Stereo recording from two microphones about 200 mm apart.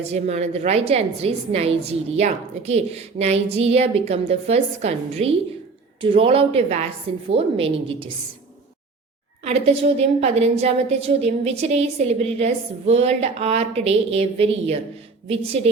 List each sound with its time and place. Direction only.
0.0 s a woman's voice: 30° right (ahead or behind)
9.4 s a woman's voice: 30° right (ahead or behind)